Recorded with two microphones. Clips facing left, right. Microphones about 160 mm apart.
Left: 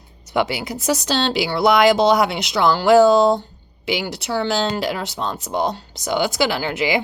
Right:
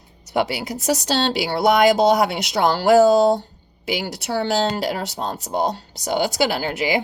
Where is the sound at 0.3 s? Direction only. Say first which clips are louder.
Left 1 dB; 35° right (ahead or behind).